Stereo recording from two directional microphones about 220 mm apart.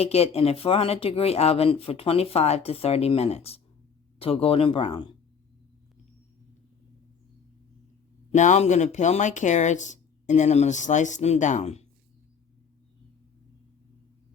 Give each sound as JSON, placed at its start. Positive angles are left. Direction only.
{"t": 0.0, "sound": "speech", "side_deg": 25}
{"t": 8.3, "sound": "speech", "side_deg": 30}